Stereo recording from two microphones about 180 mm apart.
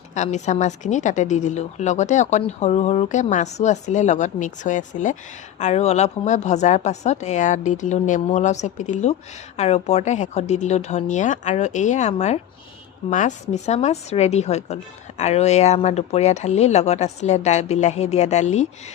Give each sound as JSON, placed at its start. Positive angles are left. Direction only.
{"t": 0.1, "sound": "a woman's voice", "side_deg": 40}